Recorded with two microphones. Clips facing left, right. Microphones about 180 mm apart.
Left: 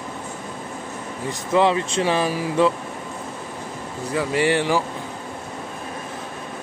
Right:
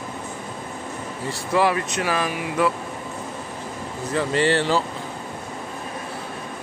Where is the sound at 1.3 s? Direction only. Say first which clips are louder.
Left 2 dB; 20° left (ahead or behind).